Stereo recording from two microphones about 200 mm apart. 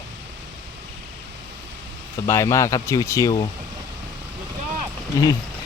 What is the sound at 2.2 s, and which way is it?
Speech, 15° left (ahead or behind).